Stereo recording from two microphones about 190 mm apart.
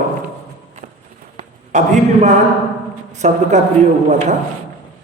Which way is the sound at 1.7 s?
40° right (ahead or behind).